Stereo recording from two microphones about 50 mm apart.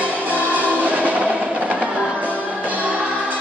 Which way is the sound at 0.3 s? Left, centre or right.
Right.